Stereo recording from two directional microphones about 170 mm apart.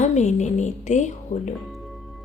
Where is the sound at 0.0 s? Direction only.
45° left (ahead or behind).